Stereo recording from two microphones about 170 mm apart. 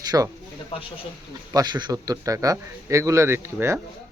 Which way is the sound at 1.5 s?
25° right (ahead or behind).